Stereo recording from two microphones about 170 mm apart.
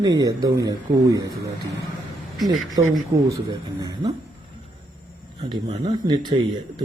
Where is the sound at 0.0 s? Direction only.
20° right (ahead or behind).